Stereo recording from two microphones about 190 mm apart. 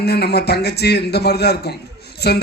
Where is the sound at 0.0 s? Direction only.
60° left (ahead or behind).